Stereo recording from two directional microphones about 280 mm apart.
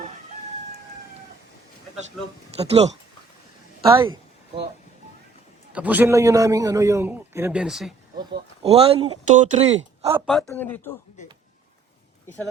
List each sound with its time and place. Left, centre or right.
2.2 s speech: centre
2.6 s speech: right
5.7 s a man's voice: centre
8.2 s speech: right
10.2 s speech: centre